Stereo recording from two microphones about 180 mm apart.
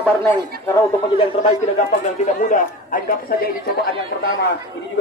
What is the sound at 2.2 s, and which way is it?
Speech, 50° left (ahead or behind).